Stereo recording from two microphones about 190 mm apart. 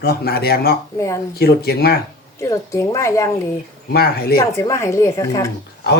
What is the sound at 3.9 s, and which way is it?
Speech, 55° left (ahead or behind).